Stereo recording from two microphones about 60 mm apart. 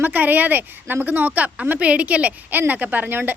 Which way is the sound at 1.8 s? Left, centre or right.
Right.